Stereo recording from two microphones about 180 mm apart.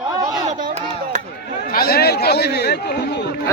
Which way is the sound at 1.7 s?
60° left (ahead or behind).